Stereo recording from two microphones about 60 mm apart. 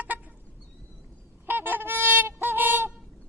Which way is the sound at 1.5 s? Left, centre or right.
Right.